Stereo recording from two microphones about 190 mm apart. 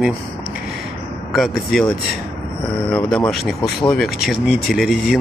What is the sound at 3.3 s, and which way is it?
Speech, centre (ahead or behind).